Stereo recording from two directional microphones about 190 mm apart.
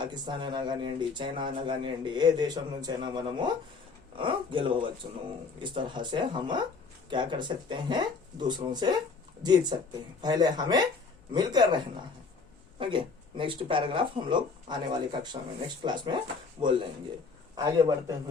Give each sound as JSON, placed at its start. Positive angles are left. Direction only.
{"t": 0.0, "sound": "speech", "side_deg": -25}
{"t": 12.8, "sound": "speech", "side_deg": -25}